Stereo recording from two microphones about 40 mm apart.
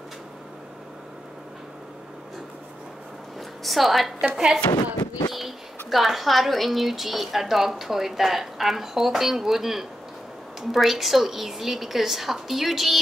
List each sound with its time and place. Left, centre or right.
3.3 s a sound: centre
4.2 s a woman's voice: centre
5.3 s speech: centre